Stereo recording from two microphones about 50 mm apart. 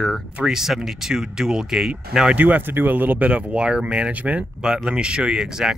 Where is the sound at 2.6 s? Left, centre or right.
Right.